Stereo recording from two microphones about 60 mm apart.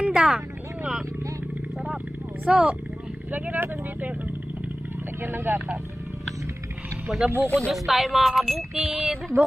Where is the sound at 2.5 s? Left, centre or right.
Centre.